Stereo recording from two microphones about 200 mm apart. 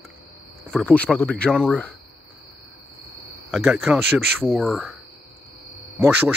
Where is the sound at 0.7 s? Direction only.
5° left (ahead or behind).